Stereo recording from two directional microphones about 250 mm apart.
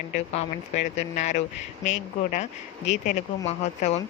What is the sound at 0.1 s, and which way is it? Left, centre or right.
Speech, left.